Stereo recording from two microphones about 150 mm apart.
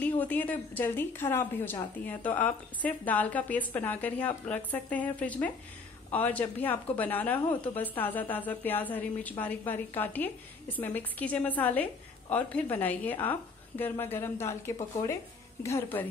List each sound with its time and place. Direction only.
0.0 s a woman's voice: 10° left (ahead or behind)